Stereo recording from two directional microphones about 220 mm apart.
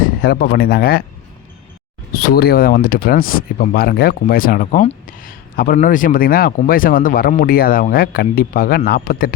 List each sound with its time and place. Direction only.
0.0 s speech: 45° left (ahead or behind)
2.1 s speech: 45° left (ahead or behind)